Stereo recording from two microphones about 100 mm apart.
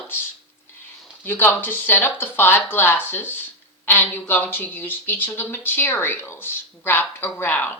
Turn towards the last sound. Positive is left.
turn(degrees=15)  # may be behind; listen again after turning